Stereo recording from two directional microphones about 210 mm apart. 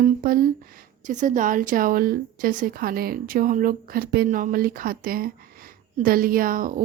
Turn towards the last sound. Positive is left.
turn(degrees=-40)  # may be behind; listen again after turning